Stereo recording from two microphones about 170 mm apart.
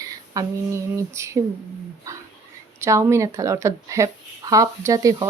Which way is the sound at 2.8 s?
15° right (ahead or behind).